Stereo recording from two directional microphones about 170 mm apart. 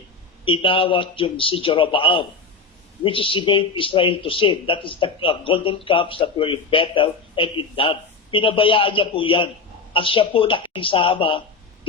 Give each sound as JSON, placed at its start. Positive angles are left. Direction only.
{"t": 0.4, "sound": "speech", "side_deg": 30}